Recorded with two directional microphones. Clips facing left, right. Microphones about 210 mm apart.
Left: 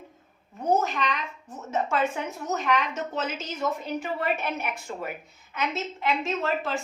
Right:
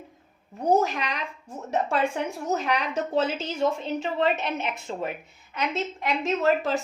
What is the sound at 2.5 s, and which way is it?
A woman's voice, 35° right (ahead or behind).